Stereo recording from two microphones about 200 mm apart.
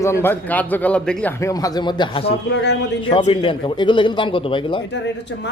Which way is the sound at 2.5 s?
60° left (ahead or behind).